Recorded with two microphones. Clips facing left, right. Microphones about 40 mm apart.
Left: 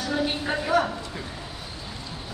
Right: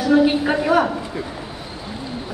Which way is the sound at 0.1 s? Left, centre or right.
Centre.